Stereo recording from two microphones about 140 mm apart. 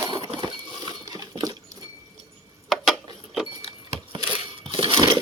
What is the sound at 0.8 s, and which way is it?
Cutlery, 25° right (ahead or behind).